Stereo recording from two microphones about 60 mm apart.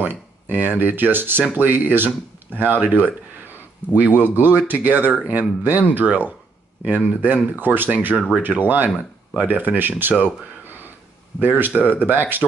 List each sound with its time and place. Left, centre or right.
0.0 s speech: right
11.3 s speech: right